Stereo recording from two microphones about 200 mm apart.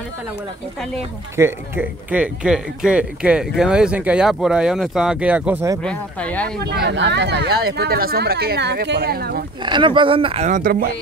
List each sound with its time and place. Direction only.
1.3 s speech: 10° right (ahead or behind)
5.8 s speech: 5° left (ahead or behind)
6.6 s speech: 55° right (ahead or behind)
9.6 s speech: 25° right (ahead or behind); by 10.9 s 45° right (ahead or behind)